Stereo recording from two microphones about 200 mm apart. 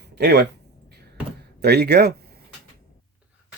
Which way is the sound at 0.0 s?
55° right (ahead or behind).